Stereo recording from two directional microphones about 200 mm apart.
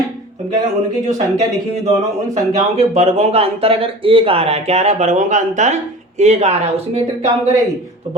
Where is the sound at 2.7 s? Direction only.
30° right (ahead or behind).